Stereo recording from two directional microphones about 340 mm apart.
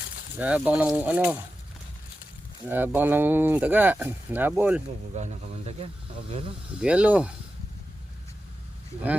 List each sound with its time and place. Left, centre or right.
0.3 s speech: centre
2.6 s speech: centre
5.1 s speech: centre
6.8 s speech: centre